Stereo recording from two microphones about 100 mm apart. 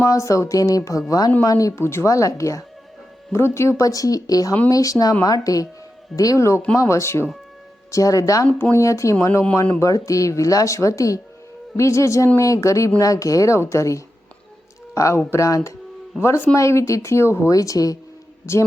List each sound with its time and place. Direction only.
0.0 s speech: 30° left (ahead or behind)